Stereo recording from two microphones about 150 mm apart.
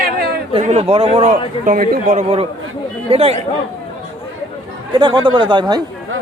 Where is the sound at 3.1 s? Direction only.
40° right (ahead or behind).